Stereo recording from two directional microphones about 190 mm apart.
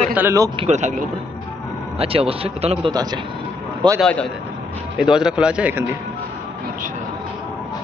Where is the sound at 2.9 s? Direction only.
20° right (ahead or behind).